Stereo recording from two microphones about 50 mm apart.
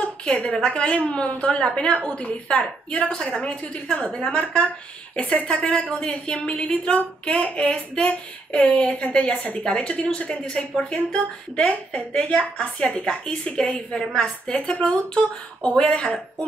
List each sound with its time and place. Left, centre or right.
0.0 s a woman's voice: left
3.4 s speech: left
3.9 s speech: centre